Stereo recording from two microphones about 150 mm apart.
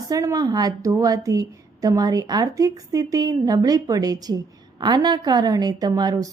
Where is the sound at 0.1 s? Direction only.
25° right (ahead or behind).